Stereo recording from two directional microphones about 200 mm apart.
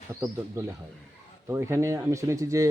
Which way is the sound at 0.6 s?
15° right (ahead or behind).